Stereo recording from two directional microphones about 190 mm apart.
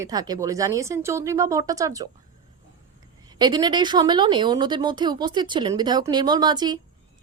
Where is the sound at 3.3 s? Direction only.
20° right (ahead or behind).